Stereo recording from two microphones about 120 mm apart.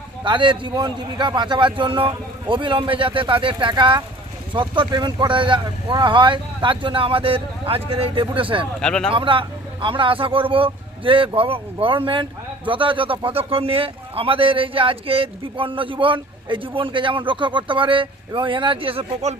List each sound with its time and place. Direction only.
0.3 s speech: 45° right (ahead or behind)
8.8 s speech: 5° left (ahead or behind)
9.0 s a man's voice: 45° right (ahead or behind)